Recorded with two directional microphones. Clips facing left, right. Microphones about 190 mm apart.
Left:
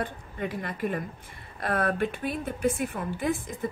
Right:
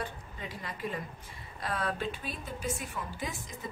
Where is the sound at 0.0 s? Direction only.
55° left (ahead or behind).